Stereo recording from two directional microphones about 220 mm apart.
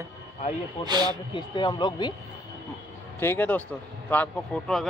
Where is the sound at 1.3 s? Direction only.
20° left (ahead or behind).